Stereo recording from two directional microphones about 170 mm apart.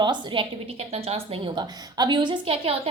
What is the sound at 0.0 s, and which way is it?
A woman's voice, 25° right (ahead or behind).